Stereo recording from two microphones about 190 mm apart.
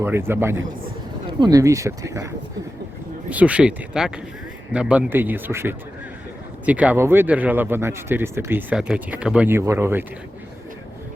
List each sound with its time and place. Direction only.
0.0 s speech: 10° right (ahead or behind)